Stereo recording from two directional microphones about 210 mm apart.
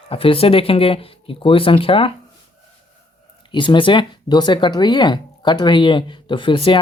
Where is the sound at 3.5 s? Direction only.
20° left (ahead or behind).